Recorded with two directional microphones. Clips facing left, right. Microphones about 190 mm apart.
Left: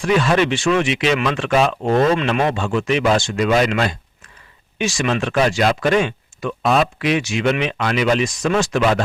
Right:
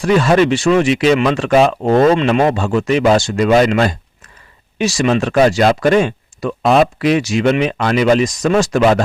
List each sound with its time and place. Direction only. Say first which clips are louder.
0.0 s speech: right 5 dB; 40° right (ahead or behind)